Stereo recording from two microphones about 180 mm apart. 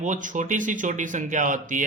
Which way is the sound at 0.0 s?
45° right (ahead or behind).